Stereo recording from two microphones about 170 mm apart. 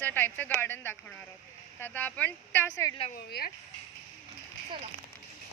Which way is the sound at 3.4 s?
70° left (ahead or behind).